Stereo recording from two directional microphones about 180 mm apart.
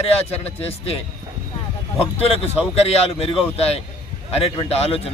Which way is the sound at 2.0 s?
35° left (ahead or behind).